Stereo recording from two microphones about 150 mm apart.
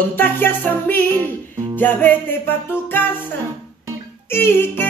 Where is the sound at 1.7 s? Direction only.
10° left (ahead or behind).